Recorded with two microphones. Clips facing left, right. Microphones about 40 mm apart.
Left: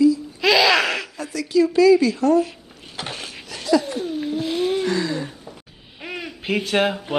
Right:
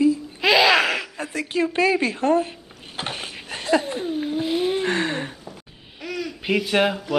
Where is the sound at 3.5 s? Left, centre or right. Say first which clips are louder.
Left 2 dB; right.